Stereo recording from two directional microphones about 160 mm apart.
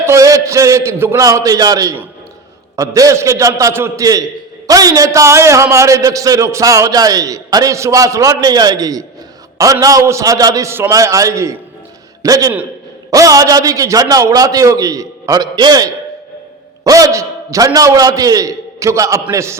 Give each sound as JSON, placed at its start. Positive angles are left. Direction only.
{"t": 0.0, "sound": "a man's voice", "side_deg": -20}